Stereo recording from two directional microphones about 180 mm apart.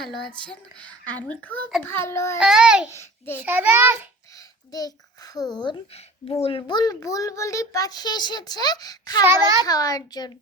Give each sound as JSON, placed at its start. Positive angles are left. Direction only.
{"t": 0.8, "sound": "a child's voice", "side_deg": 10}
{"t": 2.4, "sound": "a child's voice", "side_deg": -5}
{"t": 2.9, "sound": "a child's voice", "side_deg": 15}
{"t": 3.4, "sound": "a child's voice", "side_deg": -10}
{"t": 4.4, "sound": "a child's voice", "side_deg": 20}
{"t": 9.2, "sound": "a child's voice", "side_deg": -15}
{"t": 9.6, "sound": "a child's voice", "side_deg": 20}